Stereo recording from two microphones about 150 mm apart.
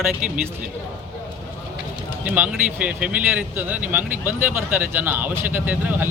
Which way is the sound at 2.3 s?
10° right (ahead or behind).